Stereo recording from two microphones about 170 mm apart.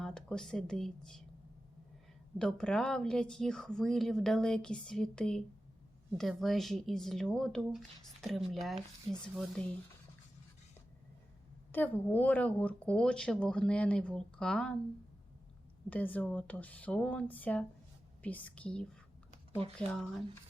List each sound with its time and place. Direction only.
0.0 s speech: 5° left (ahead or behind)
2.4 s speech: 5° left (ahead or behind)
11.7 s speech: 10° left (ahead or behind)
15.9 s speech: 10° left (ahead or behind)
19.3 s typing: 35° right (ahead or behind)
19.9 s speech: centre (ahead or behind)